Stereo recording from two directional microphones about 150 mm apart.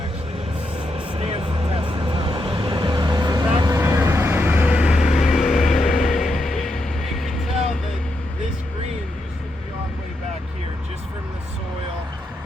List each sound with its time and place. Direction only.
0.9 s vehicle: 45° right (ahead or behind); by 5.6 s centre (ahead or behind)
5.8 s vehicle: 60° left (ahead or behind)
6.3 s music: centre (ahead or behind)